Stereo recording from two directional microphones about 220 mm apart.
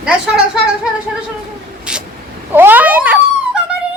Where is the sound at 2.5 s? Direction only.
10° right (ahead or behind).